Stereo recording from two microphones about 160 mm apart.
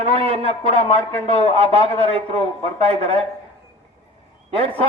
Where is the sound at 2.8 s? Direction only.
40° right (ahead or behind).